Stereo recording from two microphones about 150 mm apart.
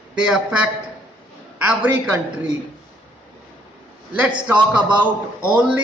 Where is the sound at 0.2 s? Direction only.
5° right (ahead or behind).